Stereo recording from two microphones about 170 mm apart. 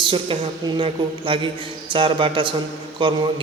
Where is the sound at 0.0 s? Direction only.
30° right (ahead or behind).